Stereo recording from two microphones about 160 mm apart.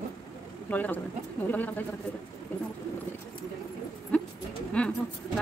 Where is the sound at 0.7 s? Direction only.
10° left (ahead or behind).